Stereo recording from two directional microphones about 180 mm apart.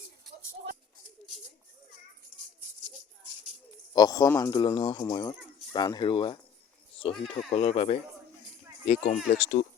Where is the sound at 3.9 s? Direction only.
20° left (ahead or behind); by 9.7 s 45° left (ahead or behind).